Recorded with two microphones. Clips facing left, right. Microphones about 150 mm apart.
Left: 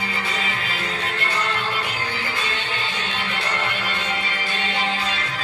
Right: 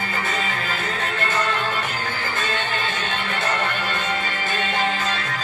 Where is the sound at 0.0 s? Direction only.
50° right (ahead or behind).